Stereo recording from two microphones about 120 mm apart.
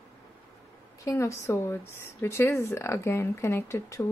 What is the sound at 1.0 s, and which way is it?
Speech, 25° left (ahead or behind).